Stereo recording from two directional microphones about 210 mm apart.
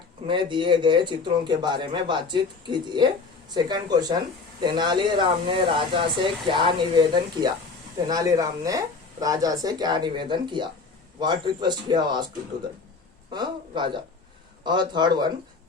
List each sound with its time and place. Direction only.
0.3 s a man's voice: 25° right (ahead or behind)
13.3 s a man's voice: 20° right (ahead or behind)